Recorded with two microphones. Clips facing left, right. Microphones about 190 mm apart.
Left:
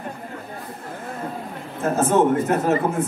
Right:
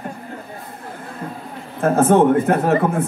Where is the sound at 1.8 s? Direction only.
60° right (ahead or behind).